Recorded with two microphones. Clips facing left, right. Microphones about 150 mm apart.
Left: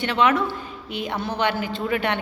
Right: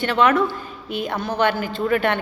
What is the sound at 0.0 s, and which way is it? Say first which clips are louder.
A woman's voice: right 3 dB; 50° right (ahead or behind).